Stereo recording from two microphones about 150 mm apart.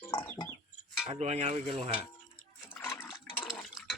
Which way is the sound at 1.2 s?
45° right (ahead or behind).